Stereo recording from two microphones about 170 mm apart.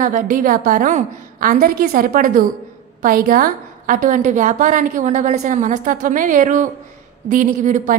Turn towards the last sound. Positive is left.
turn(degrees=-50)  # may be behind; listen again after turning